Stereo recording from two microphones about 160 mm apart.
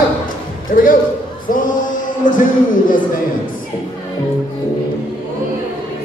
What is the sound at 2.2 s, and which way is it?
Speech, 55° left (ahead or behind).